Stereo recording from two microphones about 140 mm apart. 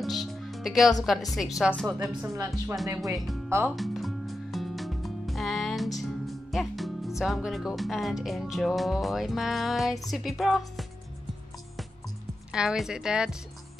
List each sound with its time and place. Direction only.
0.0 s music: centre (ahead or behind)
1.0 s speech: centre (ahead or behind)
2.2 s speech: 20° right (ahead or behind)
3.7 s music: centre (ahead or behind)
7.2 s speech: centre (ahead or behind)
12.5 s speech: 5° right (ahead or behind)